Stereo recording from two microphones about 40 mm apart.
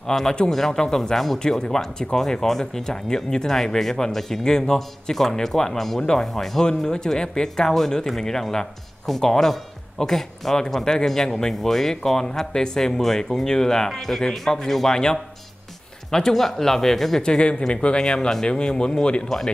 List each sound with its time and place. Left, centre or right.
0.0 s speech: centre
16.1 s speech: centre
17.2 s speech: left
19.2 s speech: centre